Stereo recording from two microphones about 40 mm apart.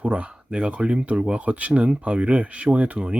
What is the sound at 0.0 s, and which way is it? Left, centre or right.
Speech, right.